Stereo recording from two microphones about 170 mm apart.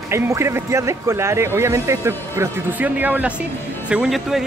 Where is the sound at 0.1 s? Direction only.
15° right (ahead or behind).